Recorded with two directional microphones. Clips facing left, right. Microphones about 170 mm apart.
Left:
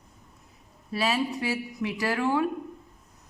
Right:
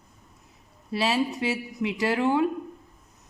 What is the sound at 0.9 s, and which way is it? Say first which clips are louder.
Speech: right 2 dB; 25° right (ahead or behind).